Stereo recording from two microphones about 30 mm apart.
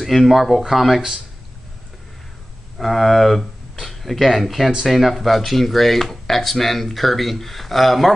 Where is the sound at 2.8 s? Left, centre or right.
Centre.